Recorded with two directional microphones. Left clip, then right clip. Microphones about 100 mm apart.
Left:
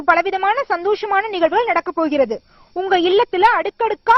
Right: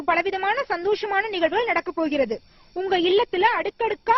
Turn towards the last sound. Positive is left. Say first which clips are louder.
# left 6 dB
turn(degrees=40)  # may be behind; listen again after turning